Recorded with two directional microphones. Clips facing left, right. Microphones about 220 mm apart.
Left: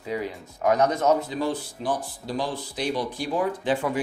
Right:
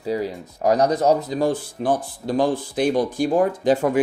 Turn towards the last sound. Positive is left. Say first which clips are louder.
# right 6 dB
turn(degrees=-45)  # may be behind; listen again after turning